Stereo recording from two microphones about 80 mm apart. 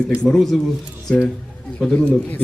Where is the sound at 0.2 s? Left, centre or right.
Centre.